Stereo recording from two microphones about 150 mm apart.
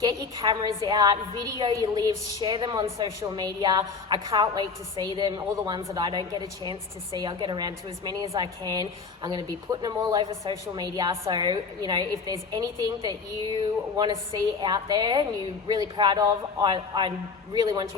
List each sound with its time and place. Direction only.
0.0 s a woman's voice: 25° right (ahead or behind)
13.9 s a woman's voice: 25° right (ahead or behind)